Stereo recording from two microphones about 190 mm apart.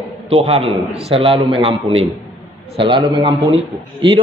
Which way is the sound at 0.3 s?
30° right (ahead or behind).